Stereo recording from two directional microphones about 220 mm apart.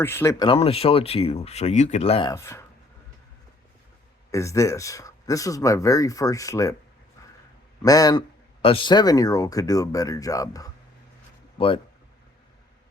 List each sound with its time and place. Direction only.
0.0 s speech: 10° left (ahead or behind)
2.3 s speech: 10° left (ahead or behind)
4.3 s speech: 15° left (ahead or behind)
7.8 s a man's voice: 15° left (ahead or behind)